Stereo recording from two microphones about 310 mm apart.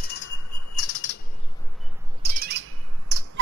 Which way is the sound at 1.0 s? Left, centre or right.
Left.